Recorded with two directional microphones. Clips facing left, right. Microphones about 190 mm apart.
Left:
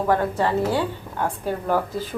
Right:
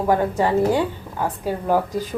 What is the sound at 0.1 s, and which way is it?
A woman's voice, 15° right (ahead or behind).